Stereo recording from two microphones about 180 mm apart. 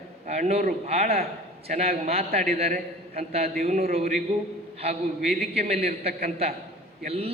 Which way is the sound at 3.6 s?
45° right (ahead or behind).